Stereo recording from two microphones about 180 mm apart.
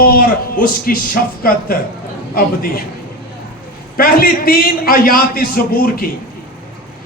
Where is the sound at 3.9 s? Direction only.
55° left (ahead or behind).